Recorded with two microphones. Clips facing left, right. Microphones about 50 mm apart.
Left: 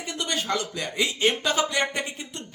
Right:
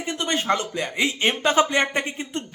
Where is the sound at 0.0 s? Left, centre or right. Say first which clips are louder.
Right 4 dB; right.